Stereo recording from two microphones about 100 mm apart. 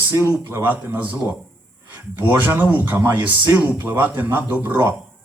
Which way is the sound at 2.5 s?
15° right (ahead or behind).